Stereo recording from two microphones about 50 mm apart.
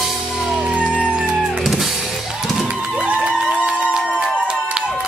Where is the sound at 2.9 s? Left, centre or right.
Centre.